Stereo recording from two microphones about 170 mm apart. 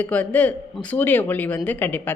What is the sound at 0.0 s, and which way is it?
Speech, 10° left (ahead or behind).